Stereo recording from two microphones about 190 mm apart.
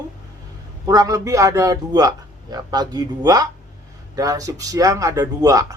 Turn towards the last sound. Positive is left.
turn(degrees=-15)  # may be behind; listen again after turning